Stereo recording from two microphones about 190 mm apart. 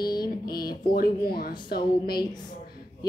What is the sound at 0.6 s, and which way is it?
Speech, 50° left (ahead or behind).